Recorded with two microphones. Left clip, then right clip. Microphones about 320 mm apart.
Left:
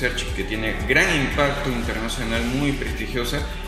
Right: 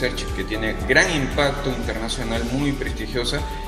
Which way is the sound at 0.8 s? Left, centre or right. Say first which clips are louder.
Right 1 dB; right.